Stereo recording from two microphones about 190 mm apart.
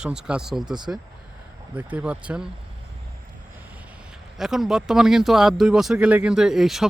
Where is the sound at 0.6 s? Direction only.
20° right (ahead or behind).